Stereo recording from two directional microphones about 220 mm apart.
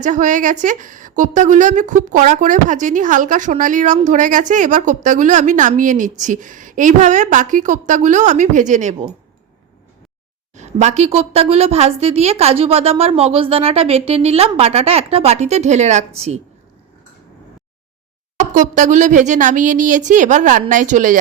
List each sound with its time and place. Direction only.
0.0 s a woman's voice: 35° right (ahead or behind)
10.5 s a woman's voice: 30° right (ahead or behind)
18.3 s a woman's voice: 35° right (ahead or behind)